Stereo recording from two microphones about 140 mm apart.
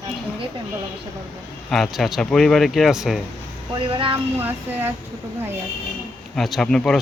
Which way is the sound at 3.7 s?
40° right (ahead or behind).